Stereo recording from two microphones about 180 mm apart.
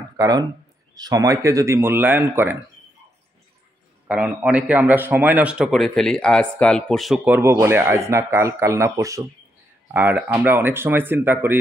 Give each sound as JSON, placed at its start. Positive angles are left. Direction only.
{"t": 0.2, "sound": "speech", "side_deg": -20}
{"t": 4.1, "sound": "a man's voice", "side_deg": -5}
{"t": 7.2, "sound": "speech", "side_deg": -10}